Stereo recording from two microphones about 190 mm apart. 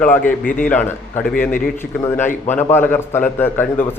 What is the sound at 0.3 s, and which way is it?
Speech, 45° left (ahead or behind).